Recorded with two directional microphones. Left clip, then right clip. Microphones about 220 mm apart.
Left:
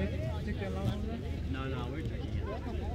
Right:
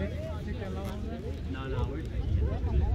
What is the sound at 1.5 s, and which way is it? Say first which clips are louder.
Vehicle: right 2 dB; 50° left (ahead or behind).